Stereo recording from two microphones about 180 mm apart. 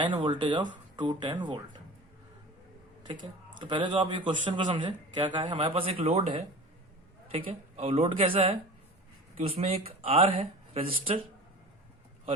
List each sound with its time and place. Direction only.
0.0 s a man's voice: 25° right (ahead or behind)
3.1 s a man's voice: 25° right (ahead or behind)